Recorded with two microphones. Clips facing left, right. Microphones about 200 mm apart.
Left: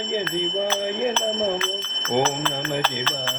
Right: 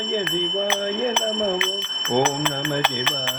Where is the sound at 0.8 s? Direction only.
15° left (ahead or behind).